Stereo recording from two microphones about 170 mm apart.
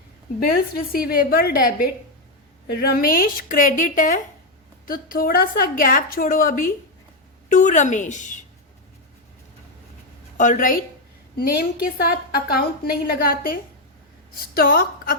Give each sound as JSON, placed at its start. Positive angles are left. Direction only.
{"t": 0.3, "sound": "a woman's voice", "side_deg": 60}
{"t": 10.3, "sound": "a woman's voice", "side_deg": 45}